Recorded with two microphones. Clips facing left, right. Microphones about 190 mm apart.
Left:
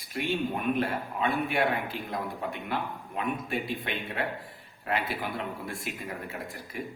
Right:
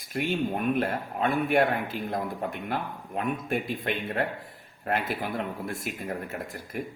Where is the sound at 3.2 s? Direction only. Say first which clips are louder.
Right 3 dB; 50° right (ahead or behind).